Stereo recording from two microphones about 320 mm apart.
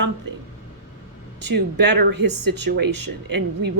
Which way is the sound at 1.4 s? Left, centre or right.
Right.